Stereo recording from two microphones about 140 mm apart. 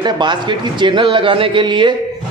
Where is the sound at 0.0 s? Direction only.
35° right (ahead or behind).